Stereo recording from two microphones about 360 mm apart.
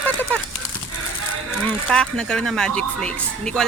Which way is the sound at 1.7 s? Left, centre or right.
Centre.